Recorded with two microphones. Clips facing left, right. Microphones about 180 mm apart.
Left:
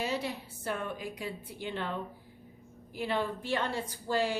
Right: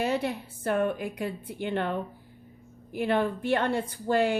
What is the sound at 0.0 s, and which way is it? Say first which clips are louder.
A woman's voice: right 6 dB; 55° right (ahead or behind).